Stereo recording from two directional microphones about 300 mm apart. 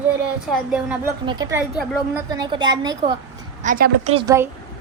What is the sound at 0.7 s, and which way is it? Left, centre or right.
A woman's voice, centre.